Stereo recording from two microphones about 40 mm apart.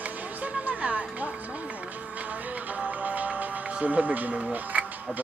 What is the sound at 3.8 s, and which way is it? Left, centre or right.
Music, right.